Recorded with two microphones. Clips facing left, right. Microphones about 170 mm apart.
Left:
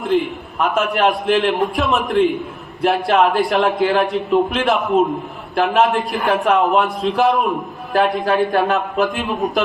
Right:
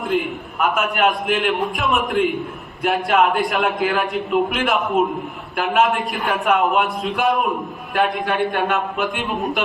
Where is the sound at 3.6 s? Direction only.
30° left (ahead or behind).